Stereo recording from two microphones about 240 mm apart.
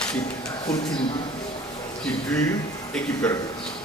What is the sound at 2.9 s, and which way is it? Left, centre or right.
Speech, centre.